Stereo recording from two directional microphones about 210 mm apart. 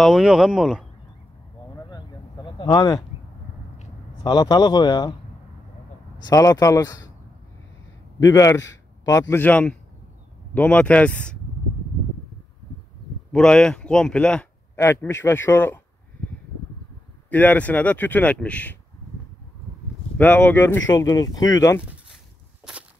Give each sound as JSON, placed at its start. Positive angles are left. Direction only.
{"t": 0.0, "sound": "speech", "side_deg": 0}
{"t": 1.8, "sound": "a sound", "side_deg": 20}
{"t": 3.7, "sound": "a sound", "side_deg": 30}
{"t": 4.3, "sound": "speech", "side_deg": 20}
{"t": 6.2, "sound": "speech", "side_deg": 15}
{"t": 8.3, "sound": "a man's voice", "side_deg": 15}
{"t": 13.3, "sound": "speech", "side_deg": 5}
{"t": 17.3, "sound": "speech", "side_deg": 10}
{"t": 20.2, "sound": "speech", "side_deg": 10}